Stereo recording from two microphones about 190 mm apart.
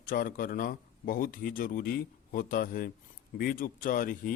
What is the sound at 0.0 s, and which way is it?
A man's voice, 50° left (ahead or behind).